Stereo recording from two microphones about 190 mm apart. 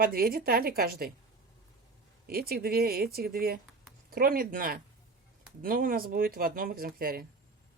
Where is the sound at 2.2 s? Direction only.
55° right (ahead or behind).